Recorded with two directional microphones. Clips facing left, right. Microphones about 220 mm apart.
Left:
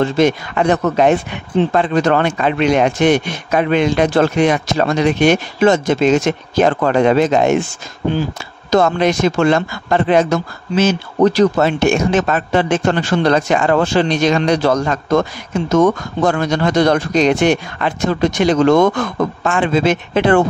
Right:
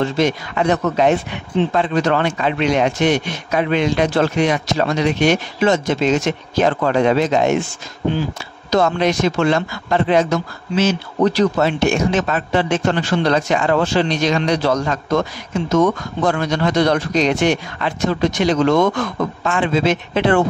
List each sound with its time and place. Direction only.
0.2 s speech: 55° left (ahead or behind)
8.6 s speech: 50° left (ahead or behind)